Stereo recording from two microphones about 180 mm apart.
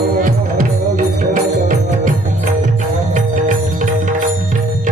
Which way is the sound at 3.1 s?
45° right (ahead or behind).